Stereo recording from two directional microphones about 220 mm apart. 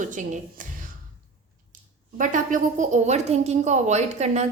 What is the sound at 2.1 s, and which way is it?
A woman's voice, 35° right (ahead or behind).